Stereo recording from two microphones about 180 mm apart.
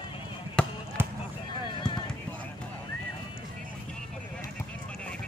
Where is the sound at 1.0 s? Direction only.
10° right (ahead or behind).